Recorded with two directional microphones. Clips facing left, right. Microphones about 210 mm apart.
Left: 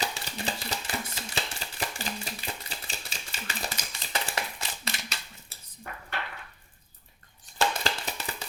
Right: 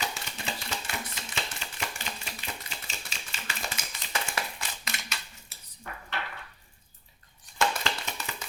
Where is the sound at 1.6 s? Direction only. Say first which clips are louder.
Left 3 dB; 35° left (ahead or behind).